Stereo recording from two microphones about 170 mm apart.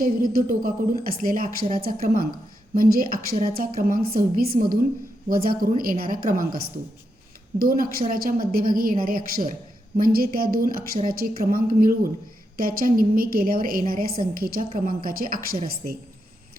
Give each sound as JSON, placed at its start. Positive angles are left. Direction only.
{"t": 0.0, "sound": "a woman's voice", "side_deg": -55}
{"t": 7.6, "sound": "a woman's voice", "side_deg": -60}